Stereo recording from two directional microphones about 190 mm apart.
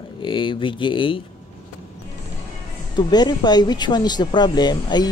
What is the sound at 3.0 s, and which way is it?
Speech, 20° left (ahead or behind).